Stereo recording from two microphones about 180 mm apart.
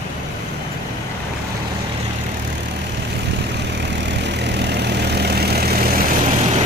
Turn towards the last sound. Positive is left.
turn(degrees=-40)  # may be behind; listen again after turning